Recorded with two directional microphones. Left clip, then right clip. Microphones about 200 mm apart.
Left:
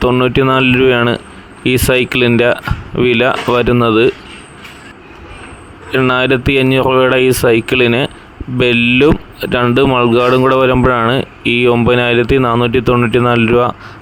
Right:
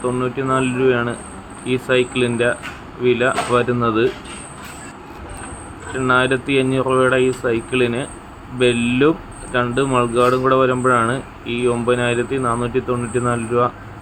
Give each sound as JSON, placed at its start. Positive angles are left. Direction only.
{"t": 0.0, "sound": "speech", "side_deg": 60}
{"t": 6.0, "sound": "speech", "side_deg": 60}